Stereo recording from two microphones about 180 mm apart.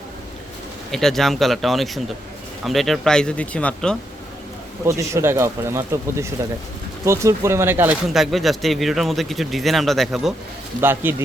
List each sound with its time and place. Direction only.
0.9 s speech: centre (ahead or behind)
4.9 s speech: 15° right (ahead or behind)
8.1 s speech: centre (ahead or behind)
10.8 s speech: 10° right (ahead or behind)